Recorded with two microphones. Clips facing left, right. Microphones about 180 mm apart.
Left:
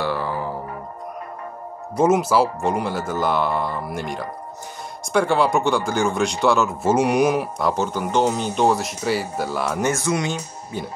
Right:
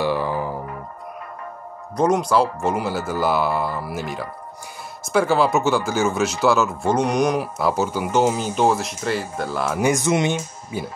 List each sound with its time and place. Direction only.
0.0 s music: 15° right (ahead or behind)
2.0 s speech: 5° left (ahead or behind)
9.8 s music: 15° right (ahead or behind)
10.7 s speech: 10° right (ahead or behind)